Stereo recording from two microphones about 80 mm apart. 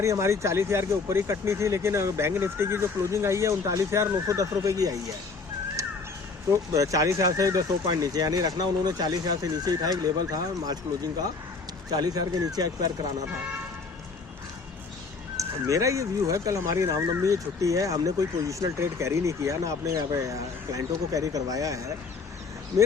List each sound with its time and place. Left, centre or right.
0.0 s speech: right
5.8 s a sound: right
6.5 s speech: right
15.4 s speech: right